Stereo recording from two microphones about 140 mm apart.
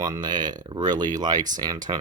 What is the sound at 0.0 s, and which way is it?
Speech, 30° right (ahead or behind).